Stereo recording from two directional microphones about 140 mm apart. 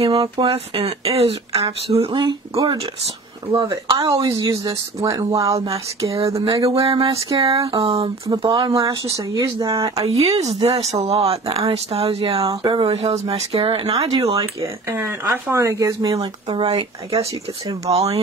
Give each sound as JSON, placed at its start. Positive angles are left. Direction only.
{"t": 0.0, "sound": "speech", "side_deg": -40}
{"t": 6.7, "sound": "speech", "side_deg": -40}
{"t": 10.0, "sound": "speech", "side_deg": -45}
{"t": 12.4, "sound": "speech", "side_deg": -30}
{"t": 12.8, "sound": "speech", "side_deg": -45}
{"t": 14.4, "sound": "speech", "side_deg": -15}
{"t": 16.2, "sound": "speech", "side_deg": -40}
{"t": 17.9, "sound": "speech", "side_deg": -45}